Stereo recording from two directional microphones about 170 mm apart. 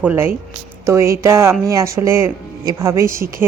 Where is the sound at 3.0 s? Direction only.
55° right (ahead or behind).